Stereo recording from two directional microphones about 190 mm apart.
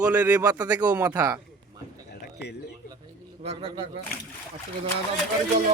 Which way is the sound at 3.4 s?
30° right (ahead or behind).